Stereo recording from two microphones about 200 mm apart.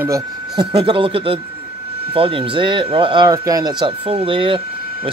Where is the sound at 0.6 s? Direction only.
25° right (ahead or behind).